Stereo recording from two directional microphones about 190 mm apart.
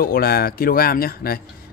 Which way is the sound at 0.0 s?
50° left (ahead or behind).